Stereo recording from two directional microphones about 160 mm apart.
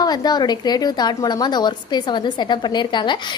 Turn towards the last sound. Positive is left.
turn(degrees=30)  # may be behind; listen again after turning